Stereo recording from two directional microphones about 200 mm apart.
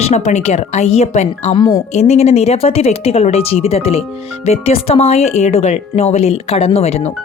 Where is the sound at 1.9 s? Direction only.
30° left (ahead or behind).